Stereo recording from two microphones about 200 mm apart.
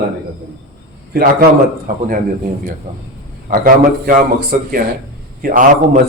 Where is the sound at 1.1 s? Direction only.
50° right (ahead or behind).